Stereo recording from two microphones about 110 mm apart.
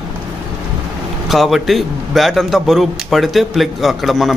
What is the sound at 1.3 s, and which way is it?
A man's voice, centre (ahead or behind).